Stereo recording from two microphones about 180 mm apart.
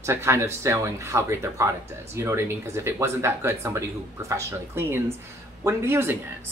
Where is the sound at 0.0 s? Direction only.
15° right (ahead or behind).